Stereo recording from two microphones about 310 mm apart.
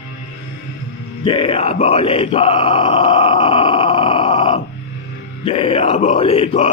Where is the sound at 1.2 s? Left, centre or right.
Centre.